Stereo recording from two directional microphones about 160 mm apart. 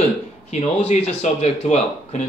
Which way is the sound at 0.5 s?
40° left (ahead or behind).